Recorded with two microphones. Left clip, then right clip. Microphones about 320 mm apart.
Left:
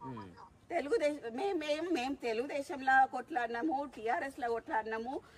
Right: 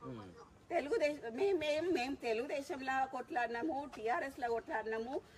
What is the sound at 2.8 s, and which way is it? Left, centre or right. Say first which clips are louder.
Speech: left 11 dB; left.